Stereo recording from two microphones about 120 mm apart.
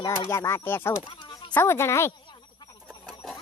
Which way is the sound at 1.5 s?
20° left (ahead or behind).